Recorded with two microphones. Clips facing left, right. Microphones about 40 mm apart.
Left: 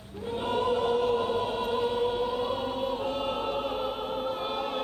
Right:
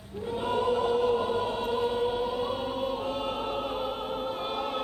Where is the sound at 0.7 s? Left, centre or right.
Left.